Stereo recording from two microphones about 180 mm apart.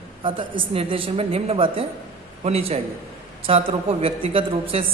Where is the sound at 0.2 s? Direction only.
30° right (ahead or behind).